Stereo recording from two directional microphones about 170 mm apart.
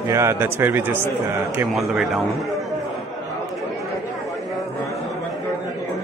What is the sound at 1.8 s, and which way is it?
Speech, centre (ahead or behind).